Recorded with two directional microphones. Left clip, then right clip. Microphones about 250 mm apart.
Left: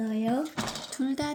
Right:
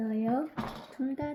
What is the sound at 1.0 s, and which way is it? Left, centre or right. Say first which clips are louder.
Speech: left 4 dB; left.